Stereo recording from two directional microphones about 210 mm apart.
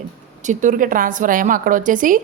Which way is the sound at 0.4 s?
35° right (ahead or behind).